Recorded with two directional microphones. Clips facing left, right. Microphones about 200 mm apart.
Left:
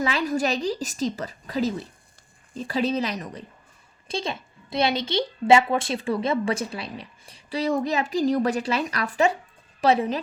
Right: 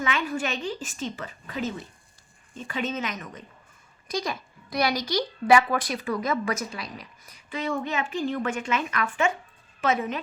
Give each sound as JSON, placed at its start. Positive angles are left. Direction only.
{"t": 0.0, "sound": "a woman's voice", "side_deg": 35}